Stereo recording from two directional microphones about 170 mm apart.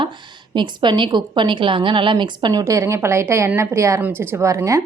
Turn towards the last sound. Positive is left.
turn(degrees=-15)  # may be behind; listen again after turning